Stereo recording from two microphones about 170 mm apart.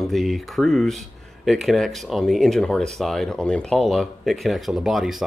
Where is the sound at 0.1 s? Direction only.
Centre (ahead or behind).